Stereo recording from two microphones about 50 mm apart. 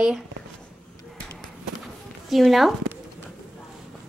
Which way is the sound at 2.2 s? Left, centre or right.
Centre.